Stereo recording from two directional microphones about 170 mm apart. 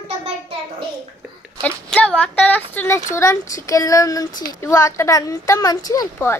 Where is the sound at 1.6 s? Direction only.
5° left (ahead or behind).